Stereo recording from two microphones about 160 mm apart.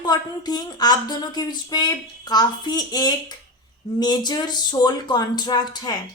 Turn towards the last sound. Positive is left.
turn(degrees=25)  # may be behind; listen again after turning